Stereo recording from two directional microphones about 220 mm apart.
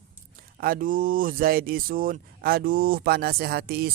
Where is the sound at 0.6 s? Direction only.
40° right (ahead or behind).